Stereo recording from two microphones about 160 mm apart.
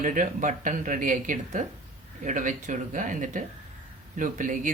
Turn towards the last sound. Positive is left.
turn(degrees=-55)  # may be behind; listen again after turning